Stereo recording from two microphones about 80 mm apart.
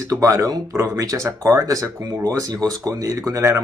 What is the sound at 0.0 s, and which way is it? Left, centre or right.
Speech, right.